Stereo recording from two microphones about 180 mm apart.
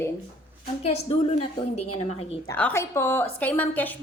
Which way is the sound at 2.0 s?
35° left (ahead or behind).